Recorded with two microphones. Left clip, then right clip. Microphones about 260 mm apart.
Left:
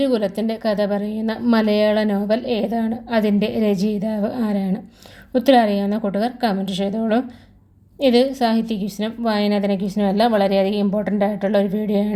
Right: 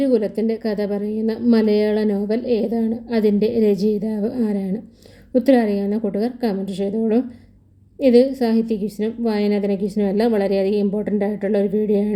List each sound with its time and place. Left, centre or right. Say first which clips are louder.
0.0 s a woman's voice: right 1 dB; left